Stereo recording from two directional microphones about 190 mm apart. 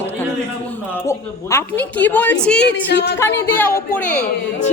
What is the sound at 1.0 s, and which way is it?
A woman's voice, 15° left (ahead or behind).